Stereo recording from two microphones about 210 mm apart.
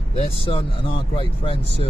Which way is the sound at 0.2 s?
25° left (ahead or behind).